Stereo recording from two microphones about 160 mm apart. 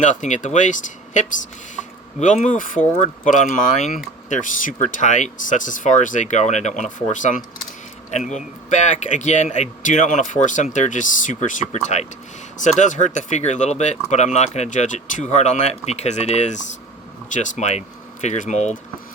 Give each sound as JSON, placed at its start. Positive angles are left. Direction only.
{"t": 0.0, "sound": "speech", "side_deg": 50}